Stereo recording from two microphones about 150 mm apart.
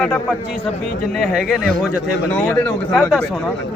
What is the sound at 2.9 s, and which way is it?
Speech, 5° left (ahead or behind).